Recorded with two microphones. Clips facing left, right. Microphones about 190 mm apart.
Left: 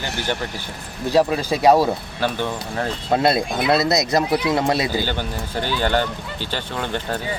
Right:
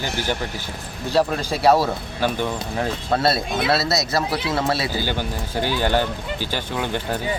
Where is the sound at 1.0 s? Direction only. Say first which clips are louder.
Left 3 dB; 10° left (ahead or behind).